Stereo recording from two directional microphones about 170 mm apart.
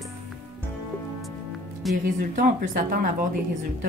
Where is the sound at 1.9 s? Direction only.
Centre (ahead or behind).